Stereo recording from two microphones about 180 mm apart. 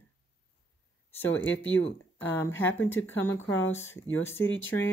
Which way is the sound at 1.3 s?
90° left.